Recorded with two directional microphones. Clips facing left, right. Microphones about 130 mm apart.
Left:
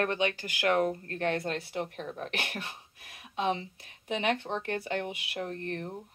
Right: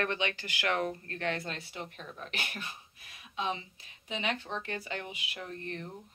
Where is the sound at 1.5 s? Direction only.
55° left (ahead or behind).